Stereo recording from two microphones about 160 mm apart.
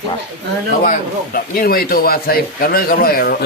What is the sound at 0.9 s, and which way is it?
A man's voice, 65° left (ahead or behind).